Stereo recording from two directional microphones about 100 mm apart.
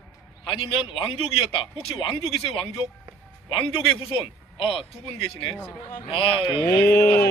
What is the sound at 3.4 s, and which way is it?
A man's voice, 65° left (ahead or behind).